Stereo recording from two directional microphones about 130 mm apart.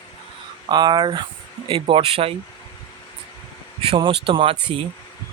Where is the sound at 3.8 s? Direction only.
40° right (ahead or behind).